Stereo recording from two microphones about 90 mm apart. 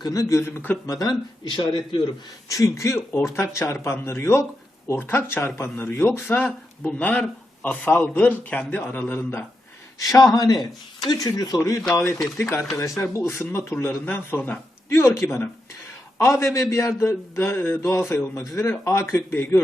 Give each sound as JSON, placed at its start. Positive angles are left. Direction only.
{"t": 0.0, "sound": "speech", "side_deg": 40}
{"t": 0.9, "sound": "speech", "side_deg": 45}
{"t": 1.5, "sound": "a man's voice", "side_deg": 60}
{"t": 2.5, "sound": "a man's voice", "side_deg": 35}
{"t": 10.0, "sound": "speech", "side_deg": 40}
{"t": 12.4, "sound": "speech", "side_deg": 30}